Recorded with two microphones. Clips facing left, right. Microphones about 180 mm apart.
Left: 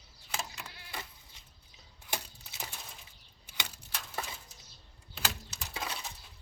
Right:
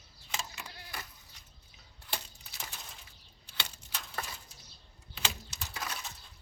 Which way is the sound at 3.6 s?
15° left (ahead or behind).